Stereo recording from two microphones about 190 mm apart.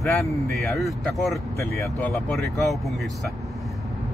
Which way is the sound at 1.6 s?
15° left (ahead or behind).